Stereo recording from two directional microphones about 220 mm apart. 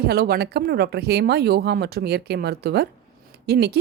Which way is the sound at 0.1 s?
45° right (ahead or behind).